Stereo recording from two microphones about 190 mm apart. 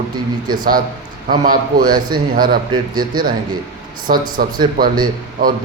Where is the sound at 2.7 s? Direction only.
20° right (ahead or behind).